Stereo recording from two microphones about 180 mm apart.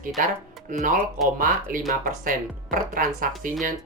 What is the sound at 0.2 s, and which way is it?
Speech, 50° right (ahead or behind).